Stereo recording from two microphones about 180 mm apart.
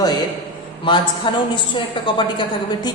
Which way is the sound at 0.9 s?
25° left (ahead or behind).